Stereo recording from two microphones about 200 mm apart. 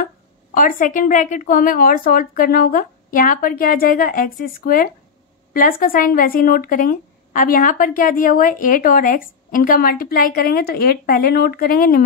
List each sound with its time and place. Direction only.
0.6 s speech: 40° left (ahead or behind)